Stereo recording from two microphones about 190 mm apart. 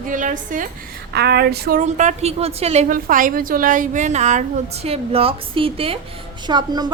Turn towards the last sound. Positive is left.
turn(degrees=-20)  # may be behind; listen again after turning